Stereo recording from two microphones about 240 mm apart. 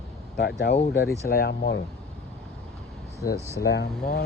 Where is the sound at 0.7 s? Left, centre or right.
Left.